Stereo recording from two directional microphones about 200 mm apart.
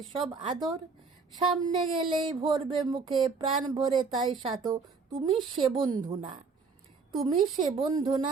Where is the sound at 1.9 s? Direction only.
25° right (ahead or behind).